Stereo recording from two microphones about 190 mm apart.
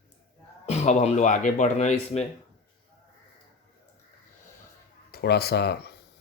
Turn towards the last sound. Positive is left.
turn(degrees=60)  # may be behind; listen again after turning